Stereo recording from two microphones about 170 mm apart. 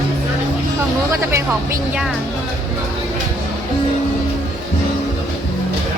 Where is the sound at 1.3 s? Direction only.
15° right (ahead or behind).